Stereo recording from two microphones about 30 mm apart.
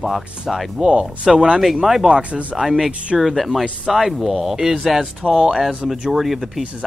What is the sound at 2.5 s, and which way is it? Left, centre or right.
Speech, centre.